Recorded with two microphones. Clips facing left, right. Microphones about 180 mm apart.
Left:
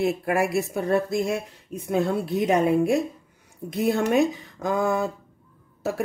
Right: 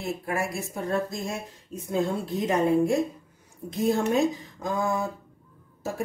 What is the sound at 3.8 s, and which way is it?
A woman's voice, 70° left (ahead or behind).